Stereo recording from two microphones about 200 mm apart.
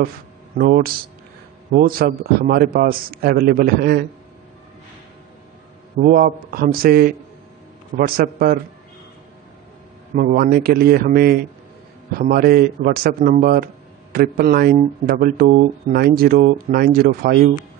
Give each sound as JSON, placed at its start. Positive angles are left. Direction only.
{"t": 0.6, "sound": "a man's voice", "side_deg": -45}
{"t": 5.9, "sound": "a man's voice", "side_deg": -45}
{"t": 10.1, "sound": "a man's voice", "side_deg": -45}